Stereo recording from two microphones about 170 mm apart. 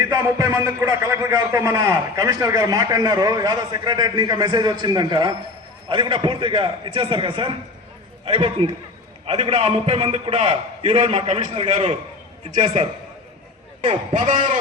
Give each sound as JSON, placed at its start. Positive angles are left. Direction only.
{"t": 0.0, "sound": "a man's voice", "side_deg": -20}
{"t": 14.2, "sound": "a man's voice", "side_deg": -50}